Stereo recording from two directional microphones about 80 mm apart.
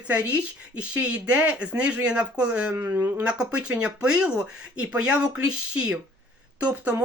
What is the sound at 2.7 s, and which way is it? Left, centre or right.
Speech, right.